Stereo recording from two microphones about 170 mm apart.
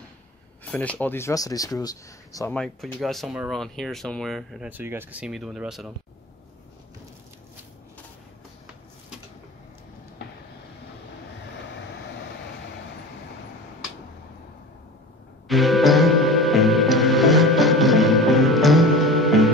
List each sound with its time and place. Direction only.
0.7 s speech: 10° left (ahead or behind)
2.5 s speech: centre (ahead or behind)
4.6 s speech: 10° right (ahead or behind)
15.4 s music: centre (ahead or behind)